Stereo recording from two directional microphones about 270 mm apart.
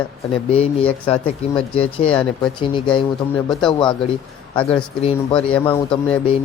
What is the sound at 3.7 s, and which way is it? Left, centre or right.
Speech, centre.